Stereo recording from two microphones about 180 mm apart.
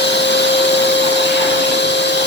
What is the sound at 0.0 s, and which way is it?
Vacuum cleaner, 75° left (ahead or behind).